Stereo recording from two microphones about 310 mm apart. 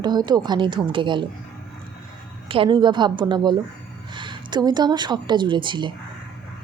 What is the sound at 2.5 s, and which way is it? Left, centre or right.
A woman's voice, centre.